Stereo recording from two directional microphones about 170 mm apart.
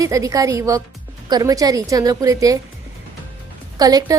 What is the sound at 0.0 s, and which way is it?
A woman's voice, 20° right (ahead or behind).